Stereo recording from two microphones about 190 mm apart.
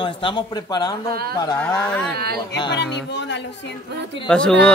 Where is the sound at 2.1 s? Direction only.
55° right (ahead or behind).